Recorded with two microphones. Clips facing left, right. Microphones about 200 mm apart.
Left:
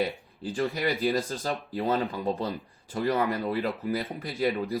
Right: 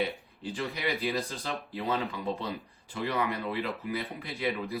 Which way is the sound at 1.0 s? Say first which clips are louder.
Left 5 dB; 40° left (ahead or behind).